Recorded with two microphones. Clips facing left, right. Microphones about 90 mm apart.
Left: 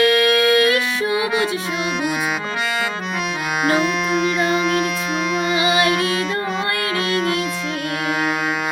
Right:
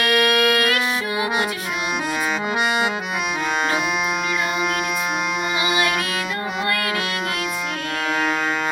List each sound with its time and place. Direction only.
0.0 s music: 20° right (ahead or behind)